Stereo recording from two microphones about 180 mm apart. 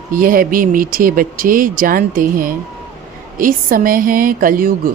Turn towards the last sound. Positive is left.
turn(degrees=-50)  # may be behind; listen again after turning